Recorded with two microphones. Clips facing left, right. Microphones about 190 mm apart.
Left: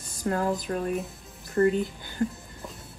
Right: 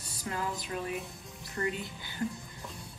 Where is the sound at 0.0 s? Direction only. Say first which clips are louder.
Left 9 dB; 45° left (ahead or behind).